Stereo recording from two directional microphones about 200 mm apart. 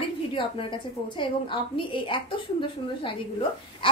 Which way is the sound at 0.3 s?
25° left (ahead or behind).